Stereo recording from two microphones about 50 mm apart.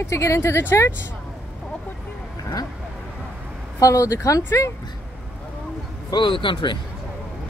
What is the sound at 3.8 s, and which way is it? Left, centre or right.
Speech, left.